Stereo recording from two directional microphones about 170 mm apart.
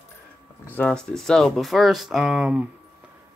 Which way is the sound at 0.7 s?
5° left (ahead or behind).